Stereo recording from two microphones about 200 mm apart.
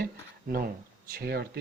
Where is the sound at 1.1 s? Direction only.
50° right (ahead or behind).